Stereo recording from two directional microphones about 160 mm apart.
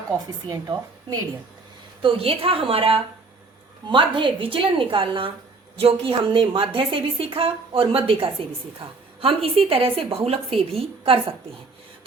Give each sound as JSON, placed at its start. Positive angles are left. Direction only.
{"t": 0.4, "sound": "a woman's voice", "side_deg": -25}
{"t": 2.0, "sound": "a woman's voice", "side_deg": -35}